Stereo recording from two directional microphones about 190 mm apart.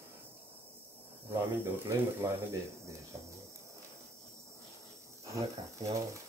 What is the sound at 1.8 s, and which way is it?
Speech, 15° right (ahead or behind).